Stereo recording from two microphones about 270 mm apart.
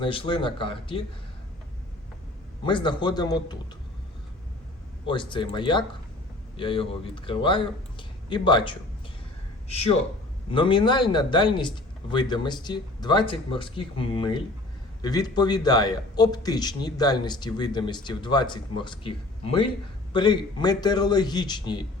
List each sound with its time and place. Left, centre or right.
0.0 s speech: centre
2.6 s speech: centre
5.0 s a man's voice: centre